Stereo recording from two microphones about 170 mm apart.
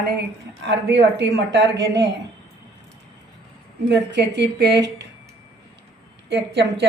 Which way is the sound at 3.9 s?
90° right.